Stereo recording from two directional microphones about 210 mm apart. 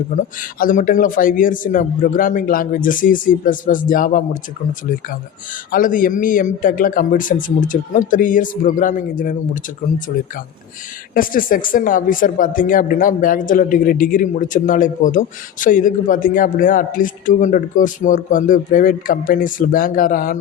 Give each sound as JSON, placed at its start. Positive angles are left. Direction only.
{"t": 0.3, "sound": "speech", "side_deg": 40}
{"t": 11.1, "sound": "speech", "side_deg": 40}